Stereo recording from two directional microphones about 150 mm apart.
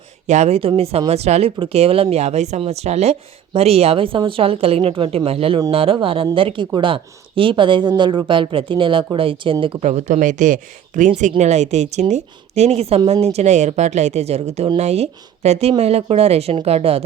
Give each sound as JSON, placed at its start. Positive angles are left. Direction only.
{"t": 0.3, "sound": "a woman's voice", "side_deg": -50}
{"t": 9.8, "sound": "a woman's voice", "side_deg": -55}